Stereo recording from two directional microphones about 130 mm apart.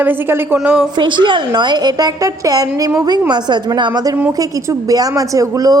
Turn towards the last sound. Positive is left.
turn(degrees=-30)  # may be behind; listen again after turning